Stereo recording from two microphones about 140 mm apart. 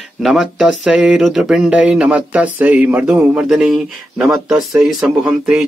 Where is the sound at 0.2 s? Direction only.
Centre (ahead or behind).